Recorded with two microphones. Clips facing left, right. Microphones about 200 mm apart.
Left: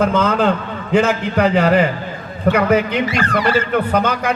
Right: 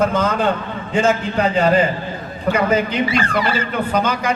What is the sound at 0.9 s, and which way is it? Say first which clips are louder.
A man's voice: left 2 dB; 65° left (ahead or behind).